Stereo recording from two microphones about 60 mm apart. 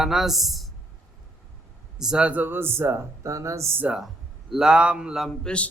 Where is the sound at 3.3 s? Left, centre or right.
Right.